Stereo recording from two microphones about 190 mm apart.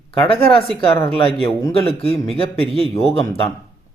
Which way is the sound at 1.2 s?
30° left (ahead or behind).